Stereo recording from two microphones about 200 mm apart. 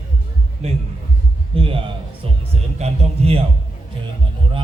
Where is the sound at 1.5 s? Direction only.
25° right (ahead or behind).